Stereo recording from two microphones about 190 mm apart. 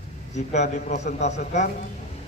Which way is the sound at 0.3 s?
35° left (ahead or behind).